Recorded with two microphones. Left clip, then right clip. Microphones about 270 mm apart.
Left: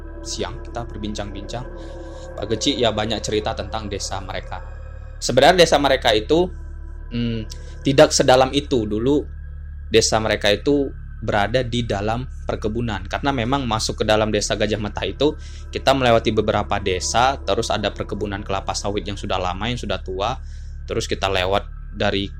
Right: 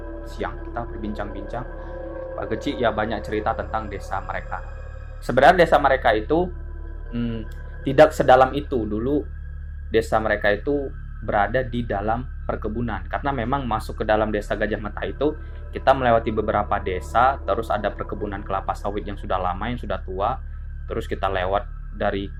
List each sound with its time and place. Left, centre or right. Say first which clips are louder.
0.3 s speech: left 1 dB; left